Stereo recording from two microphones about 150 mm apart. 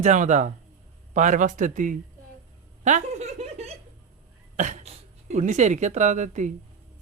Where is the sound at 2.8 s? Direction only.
50° right (ahead or behind).